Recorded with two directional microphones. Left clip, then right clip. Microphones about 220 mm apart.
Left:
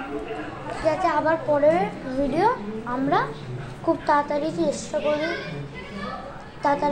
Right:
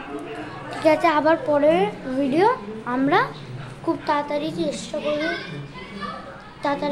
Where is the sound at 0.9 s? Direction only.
40° right (ahead or behind).